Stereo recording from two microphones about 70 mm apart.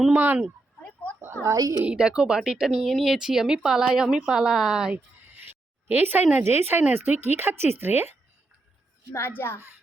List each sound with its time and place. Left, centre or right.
0.1 s speech: right
1.4 s a woman's voice: left
1.8 s speech: centre
5.3 s a sound: right
6.3 s speech: right
9.1 s a child's voice: left